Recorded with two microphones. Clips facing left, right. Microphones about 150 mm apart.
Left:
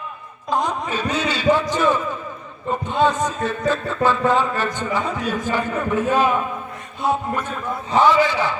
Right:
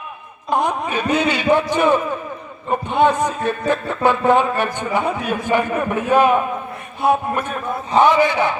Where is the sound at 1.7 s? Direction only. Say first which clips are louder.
Right 3 dB; 15° right (ahead or behind).